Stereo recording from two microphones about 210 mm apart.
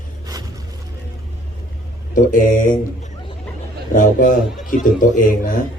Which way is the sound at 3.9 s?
40° left (ahead or behind).